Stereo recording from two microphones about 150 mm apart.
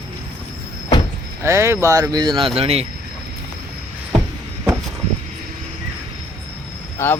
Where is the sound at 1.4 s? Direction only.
20° right (ahead or behind); by 2.8 s 40° right (ahead or behind).